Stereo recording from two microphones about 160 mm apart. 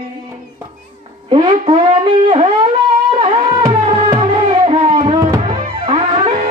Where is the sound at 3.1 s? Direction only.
30° right (ahead or behind).